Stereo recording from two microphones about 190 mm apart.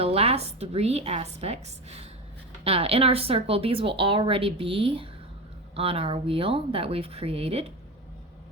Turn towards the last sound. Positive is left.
turn(degrees=-30)  # may be behind; listen again after turning